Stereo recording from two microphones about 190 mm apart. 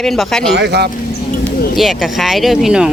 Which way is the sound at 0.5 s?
60° right (ahead or behind).